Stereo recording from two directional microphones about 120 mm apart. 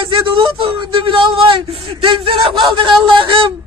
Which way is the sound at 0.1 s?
45° right (ahead or behind).